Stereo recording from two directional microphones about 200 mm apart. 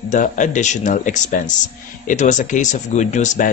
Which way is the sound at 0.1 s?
40° left (ahead or behind).